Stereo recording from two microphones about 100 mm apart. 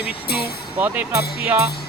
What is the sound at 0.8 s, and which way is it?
Speech, 20° right (ahead or behind).